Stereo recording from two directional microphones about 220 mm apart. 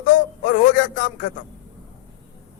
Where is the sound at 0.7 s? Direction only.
35° left (ahead or behind).